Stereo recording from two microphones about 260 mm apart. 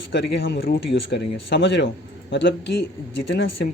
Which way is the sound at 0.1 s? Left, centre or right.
Left.